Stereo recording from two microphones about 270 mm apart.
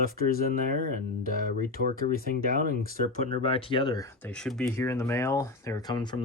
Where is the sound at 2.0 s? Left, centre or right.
Left.